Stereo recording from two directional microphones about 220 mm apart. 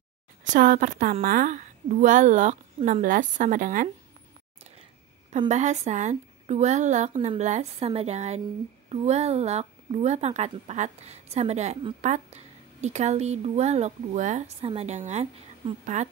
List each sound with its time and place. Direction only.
0.5 s a woman's voice: 35° right (ahead or behind)
5.5 s a woman's voice: 30° right (ahead or behind)